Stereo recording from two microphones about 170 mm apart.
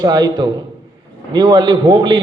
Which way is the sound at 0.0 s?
25° right (ahead or behind).